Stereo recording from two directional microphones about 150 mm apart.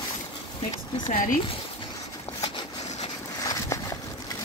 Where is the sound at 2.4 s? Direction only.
30° left (ahead or behind).